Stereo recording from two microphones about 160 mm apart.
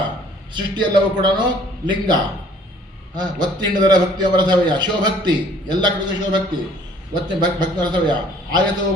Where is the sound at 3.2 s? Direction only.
25° right (ahead or behind).